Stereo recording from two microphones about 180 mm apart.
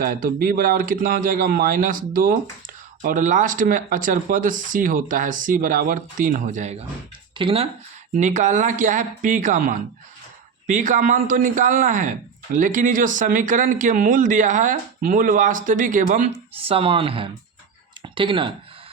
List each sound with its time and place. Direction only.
0.0 s speech: 50° right (ahead or behind); by 7.7 s 30° right (ahead or behind)
8.1 s speech: 45° right (ahead or behind)